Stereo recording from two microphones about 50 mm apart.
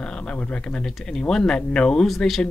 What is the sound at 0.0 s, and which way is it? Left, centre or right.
Speech, left.